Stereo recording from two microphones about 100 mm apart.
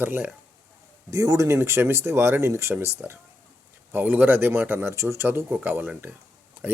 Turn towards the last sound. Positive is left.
turn(degrees=-20)  # may be behind; listen again after turning